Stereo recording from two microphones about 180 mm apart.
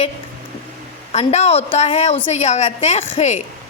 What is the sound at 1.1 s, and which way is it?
A woman's voice, 35° left (ahead or behind).